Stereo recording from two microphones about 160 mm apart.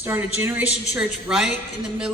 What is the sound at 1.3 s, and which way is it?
Speech, 5° right (ahead or behind).